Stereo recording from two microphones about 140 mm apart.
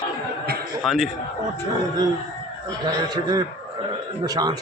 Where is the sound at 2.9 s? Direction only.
25° right (ahead or behind).